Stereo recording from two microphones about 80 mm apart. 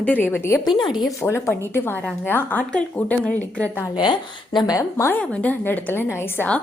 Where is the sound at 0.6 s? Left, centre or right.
Left.